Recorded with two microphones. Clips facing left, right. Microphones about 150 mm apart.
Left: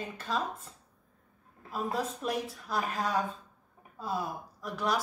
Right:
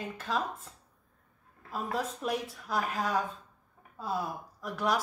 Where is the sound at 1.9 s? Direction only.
Centre (ahead or behind).